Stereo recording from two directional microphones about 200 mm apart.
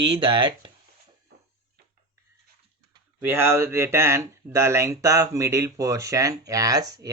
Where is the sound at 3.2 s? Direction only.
10° right (ahead or behind).